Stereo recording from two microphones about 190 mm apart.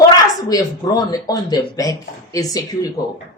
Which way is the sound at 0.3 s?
20° left (ahead or behind).